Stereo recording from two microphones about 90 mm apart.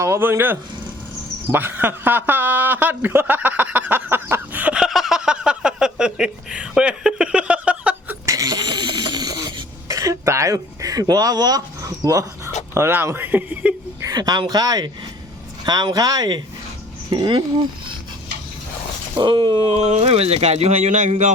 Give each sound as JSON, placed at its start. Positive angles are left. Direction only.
{"t": 0.0, "sound": "a man's voice", "side_deg": -25}
{"t": 4.8, "sound": "a sound", "side_deg": 0}
{"t": 8.3, "sound": "a sound", "side_deg": -45}
{"t": 9.9, "sound": "a sound", "side_deg": -40}
{"t": 11.0, "sound": "speech", "side_deg": -45}
{"t": 12.7, "sound": "a man's voice", "side_deg": -25}
{"t": 14.0, "sound": "speech", "side_deg": -45}
{"t": 17.1, "sound": "speech", "side_deg": -60}
{"t": 19.1, "sound": "speech", "side_deg": -60}